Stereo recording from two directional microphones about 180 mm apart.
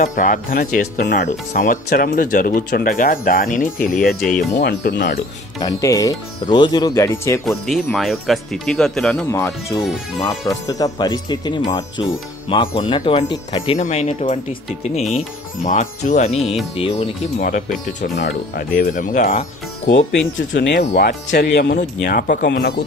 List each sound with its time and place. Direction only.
0.0 s speech: 45° left (ahead or behind)
4.2 s speech: 5° left (ahead or behind)
4.6 s speech: 60° left (ahead or behind)
5.6 s speech: 20° left (ahead or behind)
7.4 s speech: centre (ahead or behind)
9.3 s speech: 15° left (ahead or behind)
13.7 s music: 40° left (ahead or behind)
17.4 s speech: 45° left (ahead or behind)
19.9 s speech: 80° left
20.9 s speech: 55° left (ahead or behind)
21.7 s speech: 50° left (ahead or behind)